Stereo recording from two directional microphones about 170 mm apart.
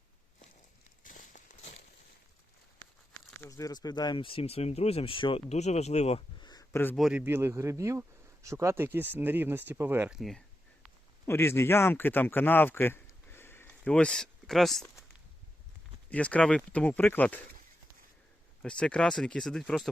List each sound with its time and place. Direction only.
1.0 s crumpling: 50° left (ahead or behind)
3.3 s speech: 15° left (ahead or behind); by 6.5 s 35° left (ahead or behind)
6.5 s a sound: 20° left (ahead or behind)
6.9 s speech: 5° right (ahead or behind)
11.3 s speech: 15° left (ahead or behind)
16.0 s speech: 10° left (ahead or behind)
18.6 s speech: 5° left (ahead or behind)